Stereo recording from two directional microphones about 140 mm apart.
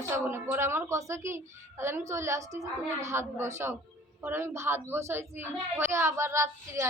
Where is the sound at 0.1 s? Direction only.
15° right (ahead or behind).